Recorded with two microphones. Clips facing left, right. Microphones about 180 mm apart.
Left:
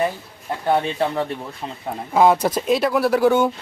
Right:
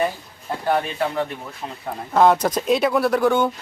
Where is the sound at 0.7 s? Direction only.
30° left (ahead or behind).